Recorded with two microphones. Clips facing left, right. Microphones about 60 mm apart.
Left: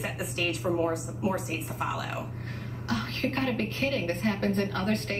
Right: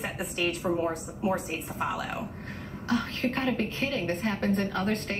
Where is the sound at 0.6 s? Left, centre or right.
Centre.